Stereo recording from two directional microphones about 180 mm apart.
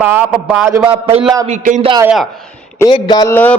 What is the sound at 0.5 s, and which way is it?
Speech, 10° right (ahead or behind).